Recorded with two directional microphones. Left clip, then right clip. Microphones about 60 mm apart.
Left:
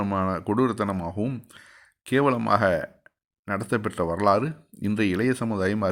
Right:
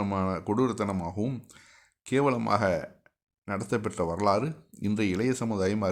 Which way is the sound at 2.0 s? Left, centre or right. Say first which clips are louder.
Left 4 dB; left.